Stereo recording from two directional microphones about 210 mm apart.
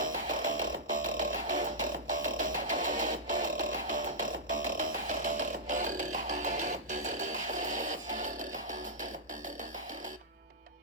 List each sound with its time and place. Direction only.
0.0 s music: 40° right (ahead or behind)